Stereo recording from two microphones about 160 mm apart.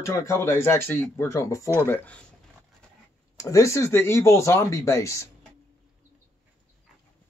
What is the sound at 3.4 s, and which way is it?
Speech, 20° left (ahead or behind).